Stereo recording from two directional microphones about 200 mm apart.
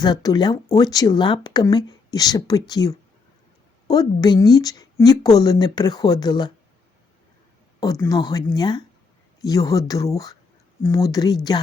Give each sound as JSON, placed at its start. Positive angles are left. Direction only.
{"t": 0.0, "sound": "speech", "side_deg": 20}
{"t": 7.8, "sound": "speech", "side_deg": 15}